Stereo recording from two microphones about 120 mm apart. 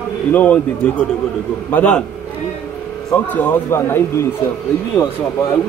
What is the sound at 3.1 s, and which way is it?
Speech, 15° left (ahead or behind).